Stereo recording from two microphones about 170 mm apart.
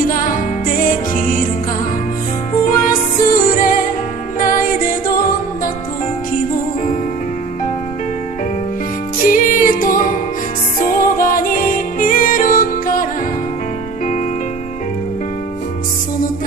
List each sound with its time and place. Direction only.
0.0 s music: 55° left (ahead or behind)
2.5 s music: 55° left (ahead or behind)
9.2 s music: 50° left (ahead or behind)